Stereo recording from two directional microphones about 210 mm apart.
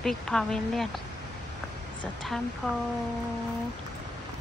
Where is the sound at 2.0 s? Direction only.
Centre (ahead or behind).